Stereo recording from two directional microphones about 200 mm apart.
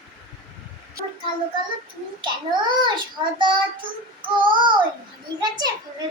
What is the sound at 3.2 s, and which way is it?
Child singing, 25° right (ahead or behind).